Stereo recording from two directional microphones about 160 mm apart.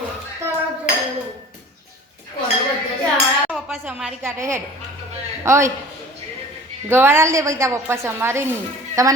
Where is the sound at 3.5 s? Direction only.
5° right (ahead or behind).